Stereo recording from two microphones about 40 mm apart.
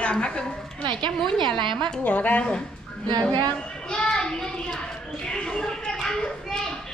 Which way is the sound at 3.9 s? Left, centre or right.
Left.